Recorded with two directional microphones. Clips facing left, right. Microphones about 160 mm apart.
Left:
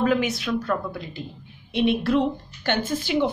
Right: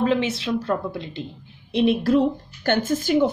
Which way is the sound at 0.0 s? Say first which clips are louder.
Right 1 dB; 25° right (ahead or behind).